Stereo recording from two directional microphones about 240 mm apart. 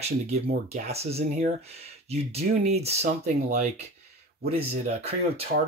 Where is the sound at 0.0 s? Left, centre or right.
Right.